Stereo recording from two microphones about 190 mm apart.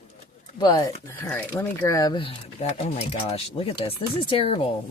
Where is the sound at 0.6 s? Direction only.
25° left (ahead or behind).